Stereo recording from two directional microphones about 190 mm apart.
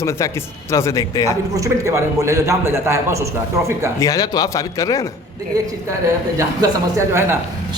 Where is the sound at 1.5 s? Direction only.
15° right (ahead or behind).